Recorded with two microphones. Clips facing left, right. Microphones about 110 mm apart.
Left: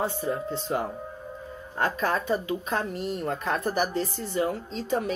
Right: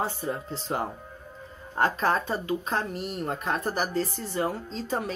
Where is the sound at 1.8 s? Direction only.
40° right (ahead or behind).